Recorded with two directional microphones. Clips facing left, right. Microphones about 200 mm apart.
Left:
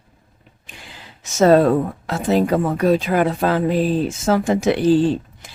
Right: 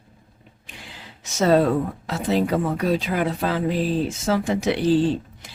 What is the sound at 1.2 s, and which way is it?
Speech, 50° left (ahead or behind).